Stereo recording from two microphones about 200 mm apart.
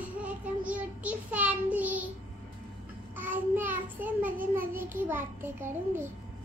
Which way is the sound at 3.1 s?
10° right (ahead or behind).